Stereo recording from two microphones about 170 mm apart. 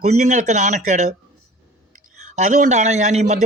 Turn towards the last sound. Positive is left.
turn(degrees=-45)  # may be behind; listen again after turning